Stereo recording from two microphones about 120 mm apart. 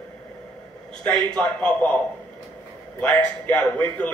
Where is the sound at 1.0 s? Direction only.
10° left (ahead or behind).